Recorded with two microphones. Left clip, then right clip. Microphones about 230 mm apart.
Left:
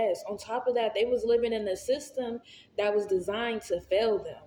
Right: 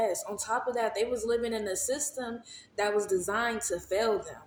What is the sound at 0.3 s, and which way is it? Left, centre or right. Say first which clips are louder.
Speech: left 2 dB; right.